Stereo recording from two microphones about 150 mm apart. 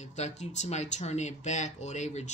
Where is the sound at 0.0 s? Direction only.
50° left (ahead or behind).